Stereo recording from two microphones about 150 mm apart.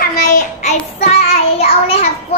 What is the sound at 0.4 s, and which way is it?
Child singing, 50° left (ahead or behind).